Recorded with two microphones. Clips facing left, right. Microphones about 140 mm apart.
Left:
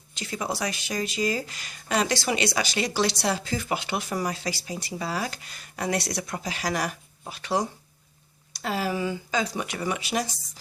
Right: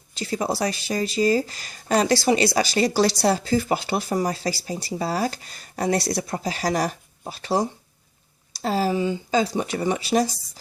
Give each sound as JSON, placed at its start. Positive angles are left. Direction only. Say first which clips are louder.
{"t": 0.1, "sound": "speech", "louder": "right 6 dB", "side_deg": -35}